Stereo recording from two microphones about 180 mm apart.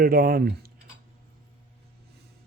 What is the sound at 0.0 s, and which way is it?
Speech, 55° right (ahead or behind).